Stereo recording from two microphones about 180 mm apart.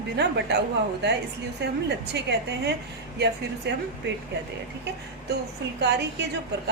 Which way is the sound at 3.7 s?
65° right (ahead or behind).